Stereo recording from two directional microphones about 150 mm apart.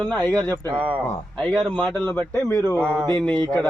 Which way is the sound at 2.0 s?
25° right (ahead or behind).